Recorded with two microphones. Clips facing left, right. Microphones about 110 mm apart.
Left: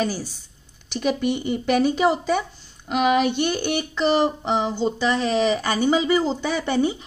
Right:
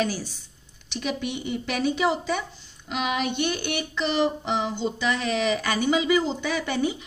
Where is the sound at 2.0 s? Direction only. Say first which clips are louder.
Left 4 dB; 45° left (ahead or behind).